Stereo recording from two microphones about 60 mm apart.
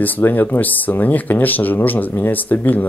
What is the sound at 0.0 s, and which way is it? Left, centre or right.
Speech, left.